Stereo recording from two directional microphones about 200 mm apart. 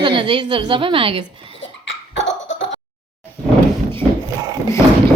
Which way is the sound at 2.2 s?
65° left (ahead or behind).